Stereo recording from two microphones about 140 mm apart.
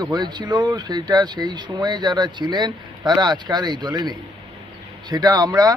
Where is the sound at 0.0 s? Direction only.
30° right (ahead or behind).